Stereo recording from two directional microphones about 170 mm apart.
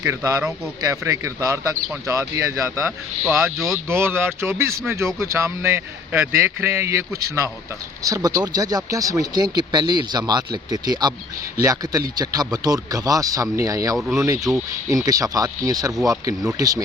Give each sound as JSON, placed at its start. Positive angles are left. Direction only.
{"t": 0.0, "sound": "a man's voice", "side_deg": -15}
{"t": 13.9, "sound": "speech", "side_deg": 0}
{"t": 14.2, "sound": "speech", "side_deg": -20}